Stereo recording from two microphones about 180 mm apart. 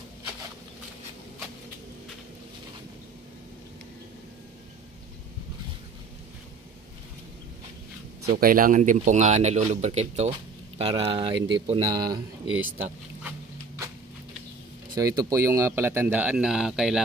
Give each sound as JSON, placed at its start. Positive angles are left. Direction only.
{"t": 8.4, "sound": "speech", "side_deg": -50}
{"t": 12.5, "sound": "speech", "side_deg": -10}
{"t": 15.0, "sound": "speech", "side_deg": -20}